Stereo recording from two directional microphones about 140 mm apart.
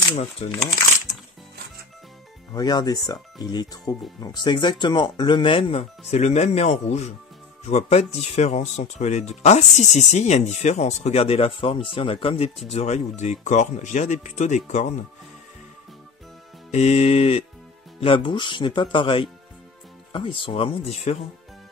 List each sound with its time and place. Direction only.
0.1 s speech: 55° left (ahead or behind)
2.5 s speech: 25° left (ahead or behind); by 15.0 s 60° left (ahead or behind)
16.7 s speech: 50° left (ahead or behind)